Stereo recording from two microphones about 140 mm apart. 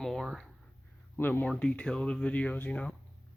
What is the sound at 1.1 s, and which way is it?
Speech, 15° left (ahead or behind).